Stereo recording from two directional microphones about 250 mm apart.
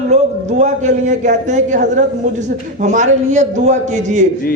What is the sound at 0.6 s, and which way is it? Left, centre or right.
A man's voice, right.